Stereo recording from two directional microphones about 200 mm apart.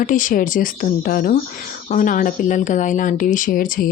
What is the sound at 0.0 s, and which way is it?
A woman's voice, 40° left (ahead or behind).